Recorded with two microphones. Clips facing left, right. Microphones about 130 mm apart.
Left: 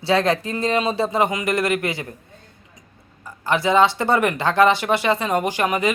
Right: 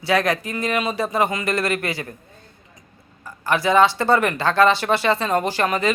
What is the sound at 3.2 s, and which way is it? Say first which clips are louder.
Speech: even; 20° left (ahead or behind).